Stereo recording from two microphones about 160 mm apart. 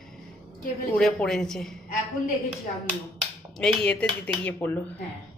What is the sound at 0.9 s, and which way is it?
Speech, 5° left (ahead or behind).